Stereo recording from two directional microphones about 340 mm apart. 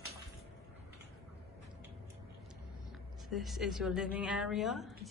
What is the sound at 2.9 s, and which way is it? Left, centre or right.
Speech, centre.